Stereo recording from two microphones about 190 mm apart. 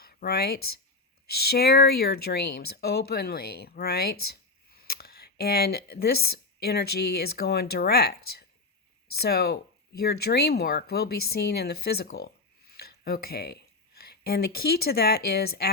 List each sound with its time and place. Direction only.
0.0 s speech: 55° left (ahead or behind)